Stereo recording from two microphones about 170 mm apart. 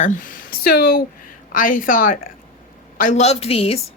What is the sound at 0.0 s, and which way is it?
A woman's voice, 50° left (ahead or behind).